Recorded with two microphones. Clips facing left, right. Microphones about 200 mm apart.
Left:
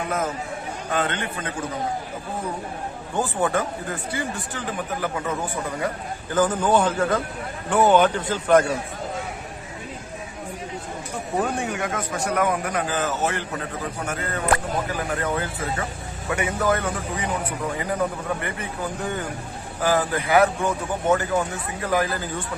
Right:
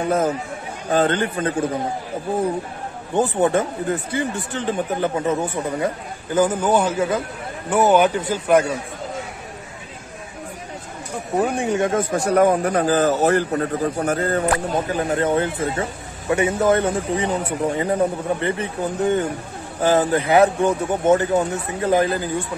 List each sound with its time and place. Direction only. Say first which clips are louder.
0.8 s speech: right 8 dB; 35° right (ahead or behind)
3.2 s speech: right 5 dB; 25° right (ahead or behind)
6.3 s a man's voice: right 2 dB; 10° right (ahead or behind)
11.6 s speech: right 7 dB; 30° right (ahead or behind)